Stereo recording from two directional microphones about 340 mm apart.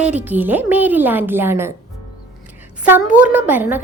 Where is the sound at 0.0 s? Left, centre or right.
Centre.